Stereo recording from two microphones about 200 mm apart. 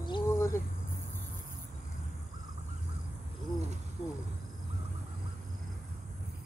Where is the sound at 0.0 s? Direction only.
20° left (ahead or behind).